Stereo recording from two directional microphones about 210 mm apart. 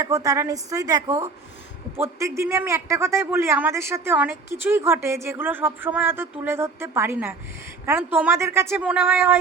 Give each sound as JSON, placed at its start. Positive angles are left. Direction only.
{"t": 0.0, "sound": "a man's voice", "side_deg": -15}